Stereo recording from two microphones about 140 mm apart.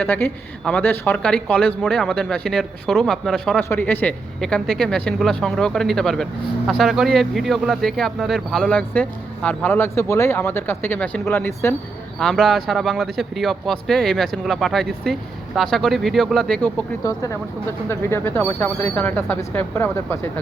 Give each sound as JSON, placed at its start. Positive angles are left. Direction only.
{"t": 0.0, "sound": "speech", "side_deg": 10}
{"t": 12.2, "sound": "speech", "side_deg": 0}
{"t": 17.0, "sound": "speech", "side_deg": 25}